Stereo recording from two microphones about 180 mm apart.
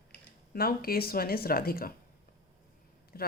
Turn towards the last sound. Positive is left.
turn(degrees=55)  # may be behind; listen again after turning